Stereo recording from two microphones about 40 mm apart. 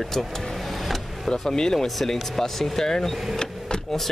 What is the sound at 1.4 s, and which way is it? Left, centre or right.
Speech, centre.